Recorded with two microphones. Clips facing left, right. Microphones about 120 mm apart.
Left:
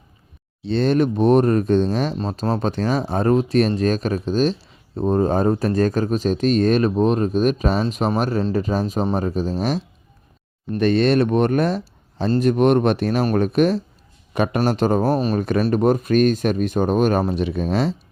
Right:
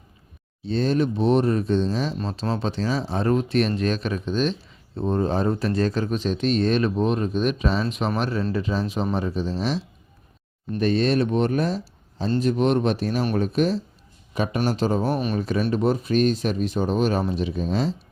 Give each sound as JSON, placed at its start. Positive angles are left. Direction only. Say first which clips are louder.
{"t": 0.6, "sound": "speech", "louder": "left 4 dB", "side_deg": 75}
{"t": 2.1, "sound": "speech", "louder": "left 4 dB", "side_deg": 40}
{"t": 10.8, "sound": "speech", "louder": "left 4 dB", "side_deg": 65}
{"t": 15.1, "sound": "speech", "louder": "left 5 dB", "side_deg": 35}
{"t": 15.4, "sound": "speech", "louder": "left 4 dB", "side_deg": 55}